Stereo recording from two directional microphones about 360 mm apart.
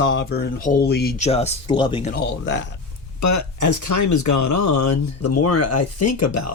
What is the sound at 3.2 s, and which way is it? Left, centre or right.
Speech, left.